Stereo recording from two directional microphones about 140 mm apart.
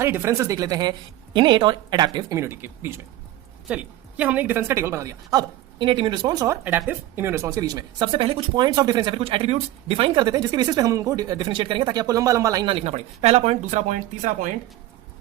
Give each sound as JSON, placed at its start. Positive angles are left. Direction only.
{"t": 0.0, "sound": "speech", "side_deg": -15}
{"t": 6.7, "sound": "speech", "side_deg": -15}
{"t": 12.6, "sound": "speech", "side_deg": -45}